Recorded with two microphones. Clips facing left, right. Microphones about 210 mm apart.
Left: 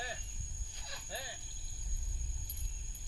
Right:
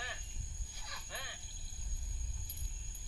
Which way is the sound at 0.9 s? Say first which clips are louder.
Left 5 dB; 30° left (ahead or behind).